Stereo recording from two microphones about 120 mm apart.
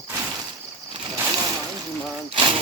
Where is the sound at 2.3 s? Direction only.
45° right (ahead or behind).